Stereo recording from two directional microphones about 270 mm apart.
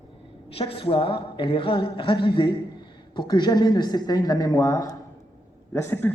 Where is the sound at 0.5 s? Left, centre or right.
Left.